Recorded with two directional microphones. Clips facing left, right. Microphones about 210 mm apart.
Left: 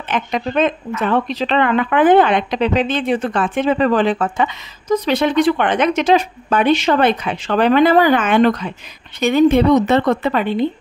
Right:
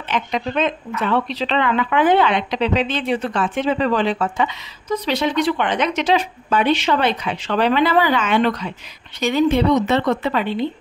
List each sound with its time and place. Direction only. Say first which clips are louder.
0.1 s speech: left 2 dB; 50° left (ahead or behind)